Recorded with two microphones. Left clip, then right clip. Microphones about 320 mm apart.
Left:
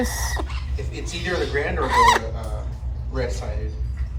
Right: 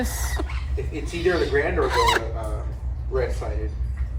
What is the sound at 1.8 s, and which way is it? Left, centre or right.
Speech, centre.